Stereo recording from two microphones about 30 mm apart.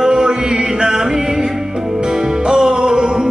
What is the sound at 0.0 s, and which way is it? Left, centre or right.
Chant, right.